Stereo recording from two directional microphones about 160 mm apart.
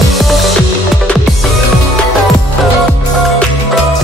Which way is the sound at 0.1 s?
Centre (ahead or behind).